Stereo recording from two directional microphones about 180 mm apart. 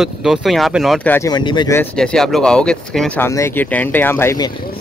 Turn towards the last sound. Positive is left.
turn(degrees=20)  # may be behind; listen again after turning